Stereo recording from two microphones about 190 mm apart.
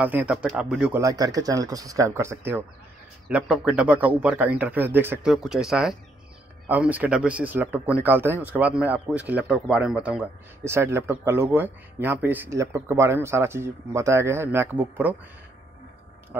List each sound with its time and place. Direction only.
0.0 s speech: 10° right (ahead or behind)
1.0 s speech: 20° right (ahead or behind)